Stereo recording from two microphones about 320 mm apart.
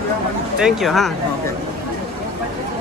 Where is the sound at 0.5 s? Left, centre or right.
Centre.